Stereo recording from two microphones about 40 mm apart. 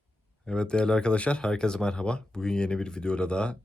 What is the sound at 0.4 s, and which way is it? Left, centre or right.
Speech, left.